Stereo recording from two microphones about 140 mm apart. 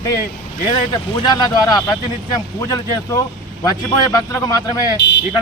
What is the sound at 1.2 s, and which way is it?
Speech, 25° left (ahead or behind).